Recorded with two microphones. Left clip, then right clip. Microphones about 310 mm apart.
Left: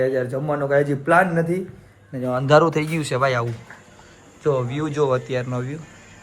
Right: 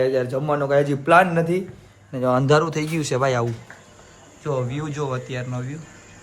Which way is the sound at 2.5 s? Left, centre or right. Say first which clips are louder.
Left 3 dB; centre.